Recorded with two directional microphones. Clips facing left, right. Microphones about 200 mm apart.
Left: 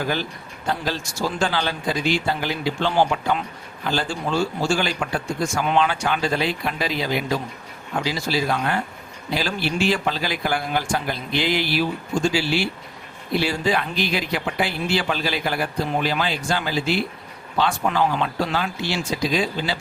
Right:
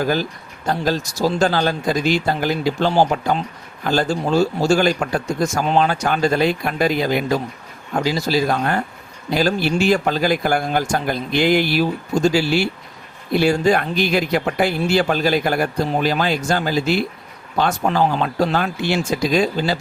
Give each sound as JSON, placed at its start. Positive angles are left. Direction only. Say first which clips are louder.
{"t": 0.0, "sound": "a man's voice", "louder": "right 5 dB", "side_deg": -40}